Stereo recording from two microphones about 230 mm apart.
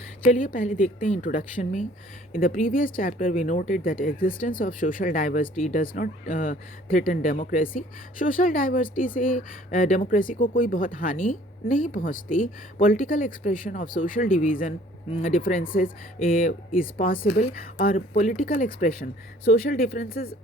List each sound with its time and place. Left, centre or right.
0.3 s speech: left